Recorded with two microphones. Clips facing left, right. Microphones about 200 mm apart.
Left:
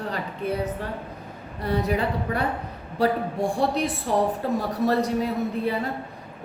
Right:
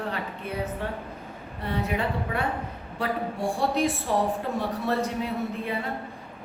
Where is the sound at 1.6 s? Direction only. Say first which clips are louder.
Left 4 dB; 40° left (ahead or behind).